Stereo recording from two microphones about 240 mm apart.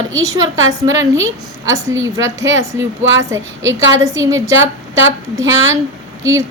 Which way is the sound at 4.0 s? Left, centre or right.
Centre.